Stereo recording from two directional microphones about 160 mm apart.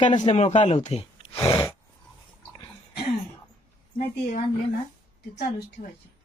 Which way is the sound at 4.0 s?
60° left (ahead or behind).